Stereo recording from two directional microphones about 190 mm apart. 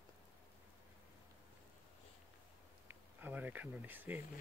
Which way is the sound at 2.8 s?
10° right (ahead or behind).